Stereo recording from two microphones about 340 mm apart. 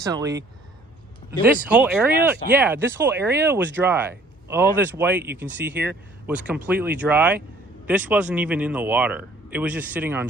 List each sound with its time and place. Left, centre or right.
0.0 s speech: centre
1.6 s speech: centre